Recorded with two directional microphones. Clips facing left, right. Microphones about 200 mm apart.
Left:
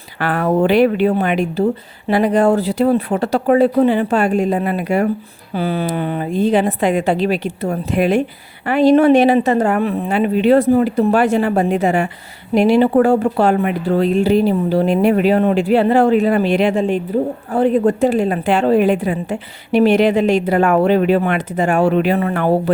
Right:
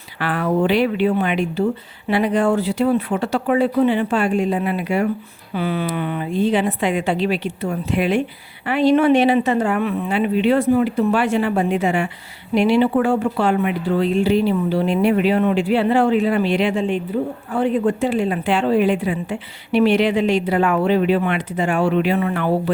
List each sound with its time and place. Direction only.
0.2 s a woman's voice: 45° left (ahead or behind)